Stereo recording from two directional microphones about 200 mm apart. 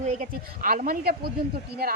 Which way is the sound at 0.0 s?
40° right (ahead or behind).